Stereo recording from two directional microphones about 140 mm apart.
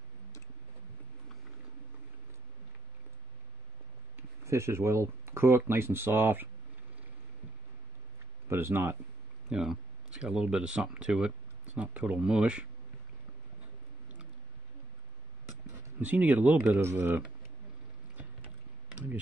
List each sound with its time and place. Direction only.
4.2 s speech: 20° right (ahead or behind)
8.5 s speech: 15° right (ahead or behind)
9.5 s speech: 5° right (ahead or behind)
15.7 s speech: 10° right (ahead or behind)